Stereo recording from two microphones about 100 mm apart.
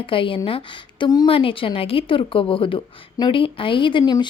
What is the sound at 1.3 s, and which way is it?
A woman's voice, 65° left (ahead or behind).